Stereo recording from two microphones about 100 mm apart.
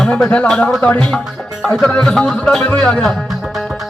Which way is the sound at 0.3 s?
10° left (ahead or behind).